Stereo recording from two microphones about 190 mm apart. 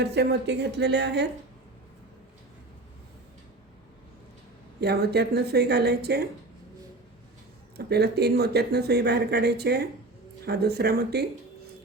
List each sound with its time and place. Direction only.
0.0 s speech: 60° right (ahead or behind)
4.8 s speech: 60° right (ahead or behind)
7.8 s speech: 60° right (ahead or behind)